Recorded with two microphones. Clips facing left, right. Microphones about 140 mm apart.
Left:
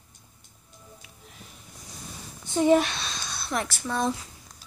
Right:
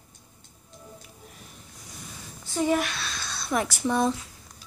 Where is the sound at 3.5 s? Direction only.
10° right (ahead or behind).